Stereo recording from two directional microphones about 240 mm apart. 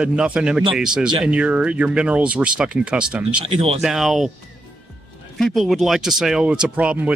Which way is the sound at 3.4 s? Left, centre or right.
Right.